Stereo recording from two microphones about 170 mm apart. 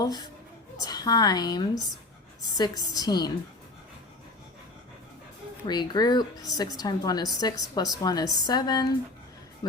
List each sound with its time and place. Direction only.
0.0 s a woman's voice: 25° left (ahead or behind)
5.6 s a woman's voice: 25° left (ahead or behind)